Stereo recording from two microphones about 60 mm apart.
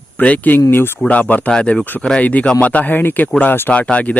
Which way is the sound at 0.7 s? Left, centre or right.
Left.